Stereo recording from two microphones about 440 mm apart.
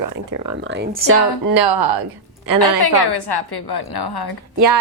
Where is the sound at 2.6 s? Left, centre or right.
Left.